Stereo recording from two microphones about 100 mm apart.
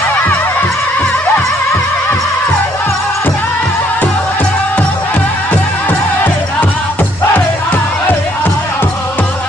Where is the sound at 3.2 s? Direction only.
15° left (ahead or behind).